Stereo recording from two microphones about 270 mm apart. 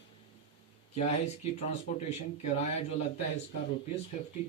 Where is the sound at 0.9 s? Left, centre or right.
Left.